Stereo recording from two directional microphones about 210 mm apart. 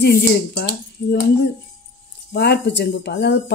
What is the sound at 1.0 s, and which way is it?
Speech, 50° left (ahead or behind).